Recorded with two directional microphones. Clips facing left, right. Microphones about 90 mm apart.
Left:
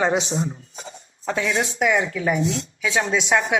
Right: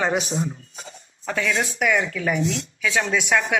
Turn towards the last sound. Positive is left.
turn(degrees=20)  # may be behind; listen again after turning